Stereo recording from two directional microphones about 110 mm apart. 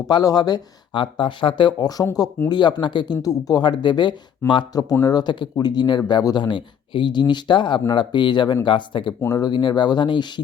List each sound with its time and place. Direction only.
0.1 s speech: 35° left (ahead or behind)